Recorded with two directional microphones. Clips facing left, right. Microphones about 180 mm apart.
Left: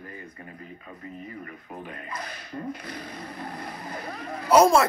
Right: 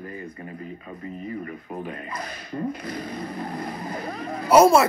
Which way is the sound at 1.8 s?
30° right (ahead or behind).